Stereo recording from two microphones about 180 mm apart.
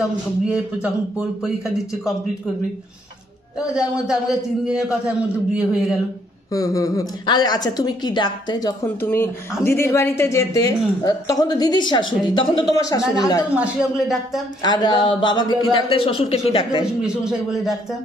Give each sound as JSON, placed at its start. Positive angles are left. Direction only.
{"t": 0.0, "sound": "a man's voice", "side_deg": -5}
{"t": 3.5, "sound": "a man's voice", "side_deg": -5}
{"t": 6.5, "sound": "a woman's voice", "side_deg": 20}
{"t": 8.8, "sound": "a woman's voice", "side_deg": 10}
{"t": 13.6, "sound": "a man's voice", "side_deg": -5}
{"t": 14.6, "sound": "a woman's voice", "side_deg": 20}
{"t": 16.8, "sound": "a man's voice", "side_deg": -5}